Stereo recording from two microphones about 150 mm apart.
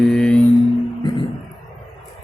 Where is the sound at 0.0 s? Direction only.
5° left (ahead or behind).